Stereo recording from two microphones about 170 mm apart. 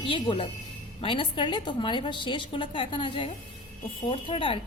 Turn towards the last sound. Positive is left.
turn(degrees=30)  # may be behind; listen again after turning